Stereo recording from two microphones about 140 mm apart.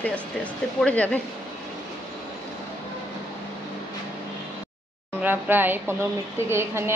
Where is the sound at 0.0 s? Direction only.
10° left (ahead or behind).